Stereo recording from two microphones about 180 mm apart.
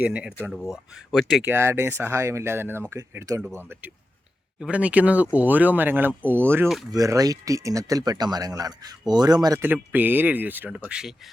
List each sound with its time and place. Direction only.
0.0 s speech: 5° right (ahead or behind)
1.5 s speech: 15° right (ahead or behind)
4.6 s speech: 5° right (ahead or behind)